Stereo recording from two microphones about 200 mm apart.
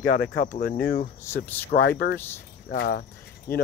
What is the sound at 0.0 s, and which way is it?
Speech, 40° left (ahead or behind).